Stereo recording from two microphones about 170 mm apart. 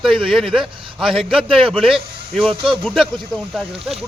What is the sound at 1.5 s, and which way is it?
Speech, 30° right (ahead or behind).